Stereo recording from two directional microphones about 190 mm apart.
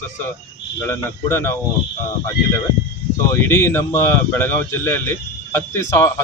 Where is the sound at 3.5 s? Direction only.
15° left (ahead or behind).